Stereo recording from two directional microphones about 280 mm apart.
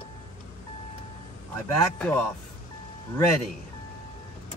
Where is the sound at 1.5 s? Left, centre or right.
Centre.